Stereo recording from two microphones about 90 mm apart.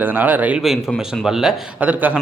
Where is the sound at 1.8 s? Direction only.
20° right (ahead or behind).